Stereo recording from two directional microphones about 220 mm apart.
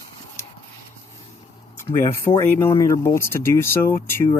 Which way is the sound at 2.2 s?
10° left (ahead or behind).